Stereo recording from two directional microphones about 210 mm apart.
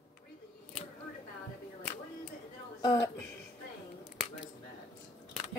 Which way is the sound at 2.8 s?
15° left (ahead or behind).